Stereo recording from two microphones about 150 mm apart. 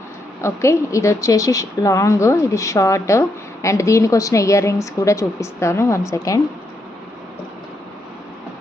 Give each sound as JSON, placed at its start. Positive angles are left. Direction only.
{"t": 0.4, "sound": "a woman's voice", "side_deg": 20}